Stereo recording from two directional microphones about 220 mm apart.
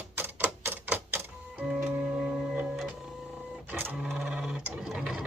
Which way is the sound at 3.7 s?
5° right (ahead or behind).